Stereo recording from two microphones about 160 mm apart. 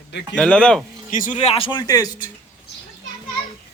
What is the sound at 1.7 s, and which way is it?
Speech, 25° left (ahead or behind).